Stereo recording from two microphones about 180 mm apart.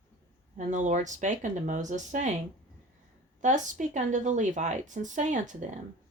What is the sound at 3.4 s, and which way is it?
Speech, 45° right (ahead or behind).